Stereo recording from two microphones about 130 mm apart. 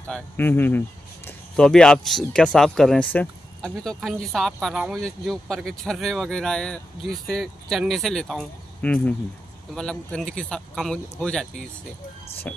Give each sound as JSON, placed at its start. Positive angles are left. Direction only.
{"t": 0.0, "sound": "speech", "side_deg": 15}
{"t": 1.7, "sound": "speech", "side_deg": 5}